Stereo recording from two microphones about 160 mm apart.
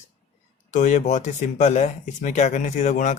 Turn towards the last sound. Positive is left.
turn(degrees=50)  # may be behind; listen again after turning